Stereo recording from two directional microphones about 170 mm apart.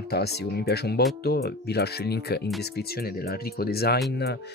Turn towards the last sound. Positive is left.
turn(degrees=75)  # may be behind; listen again after turning